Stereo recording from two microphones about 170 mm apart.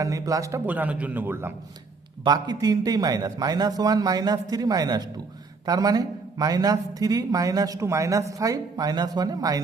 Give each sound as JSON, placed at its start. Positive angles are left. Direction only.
{"t": 0.0, "sound": "a man's voice", "side_deg": -20}
{"t": 2.2, "sound": "a man's voice", "side_deg": -20}